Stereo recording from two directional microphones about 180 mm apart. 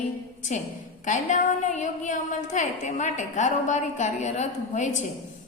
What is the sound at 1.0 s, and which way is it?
A woman's voice, 45° left (ahead or behind).